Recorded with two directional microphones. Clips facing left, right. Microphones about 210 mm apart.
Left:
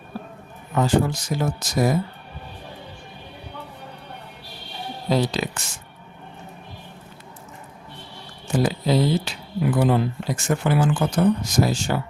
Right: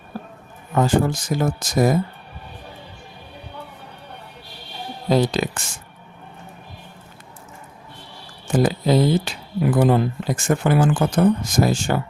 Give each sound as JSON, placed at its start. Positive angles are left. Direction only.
{"t": 0.8, "sound": "speech", "side_deg": -50}
{"t": 5.0, "sound": "speech", "side_deg": -50}
{"t": 8.5, "sound": "speech", "side_deg": -50}